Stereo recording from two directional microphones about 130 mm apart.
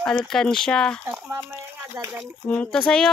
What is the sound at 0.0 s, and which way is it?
Speech, 5° left (ahead or behind).